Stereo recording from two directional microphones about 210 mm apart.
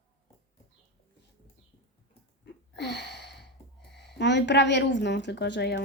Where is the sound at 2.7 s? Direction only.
55° left (ahead or behind).